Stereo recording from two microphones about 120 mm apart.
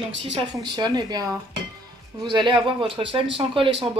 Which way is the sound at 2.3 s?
40° right (ahead or behind).